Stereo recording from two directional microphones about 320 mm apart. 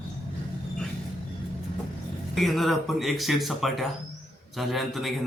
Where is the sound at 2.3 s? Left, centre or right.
Centre.